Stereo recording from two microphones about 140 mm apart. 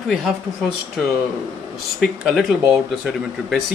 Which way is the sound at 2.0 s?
5° right (ahead or behind).